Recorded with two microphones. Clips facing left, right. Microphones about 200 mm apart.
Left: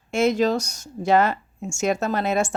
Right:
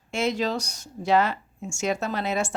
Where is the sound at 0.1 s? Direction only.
45° left (ahead or behind).